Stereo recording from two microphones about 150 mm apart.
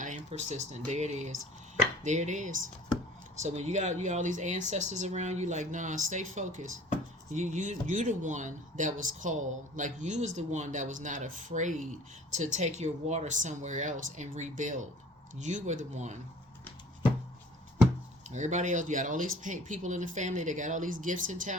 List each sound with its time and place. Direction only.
0.0 s speech: 55° right (ahead or behind)
18.3 s speech: 55° right (ahead or behind)